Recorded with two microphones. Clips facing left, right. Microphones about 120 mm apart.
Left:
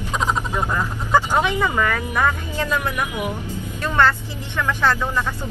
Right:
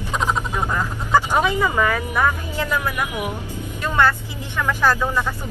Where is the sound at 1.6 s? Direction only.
10° right (ahead or behind).